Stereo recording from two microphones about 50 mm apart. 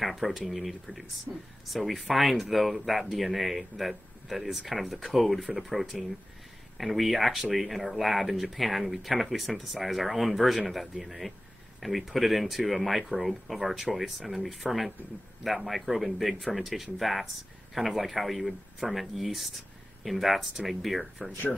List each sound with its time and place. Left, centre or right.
0.0 s speech: centre
1.3 s speech: right
1.7 s speech: centre